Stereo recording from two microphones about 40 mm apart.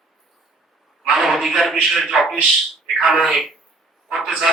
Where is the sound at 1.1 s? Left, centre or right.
Centre.